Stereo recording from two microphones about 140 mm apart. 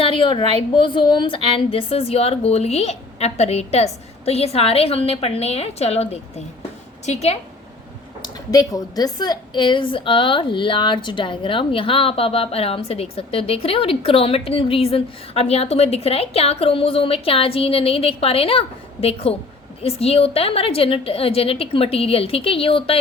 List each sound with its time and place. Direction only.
0.0 s a sound: 40° left (ahead or behind)
0.8 s a woman's voice: 35° left (ahead or behind); by 7.3 s 50° left (ahead or behind)
8.2 s a woman's voice: 25° left (ahead or behind); by 23.0 s 40° left (ahead or behind)